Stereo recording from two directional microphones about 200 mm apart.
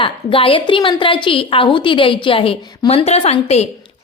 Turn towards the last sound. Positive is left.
turn(degrees=30)  # may be behind; listen again after turning